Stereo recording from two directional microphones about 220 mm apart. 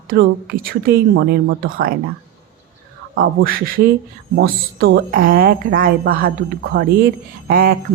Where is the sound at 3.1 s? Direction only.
45° right (ahead or behind).